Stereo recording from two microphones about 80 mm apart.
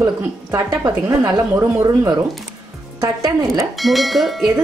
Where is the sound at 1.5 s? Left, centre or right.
Right.